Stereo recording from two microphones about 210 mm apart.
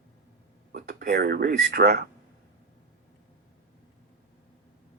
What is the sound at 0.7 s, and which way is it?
Speech, 45° right (ahead or behind).